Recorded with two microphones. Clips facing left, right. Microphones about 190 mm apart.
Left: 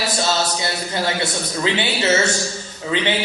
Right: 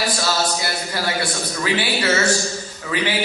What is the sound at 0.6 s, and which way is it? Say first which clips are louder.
A man's voice: left 2 dB; 25° left (ahead or behind).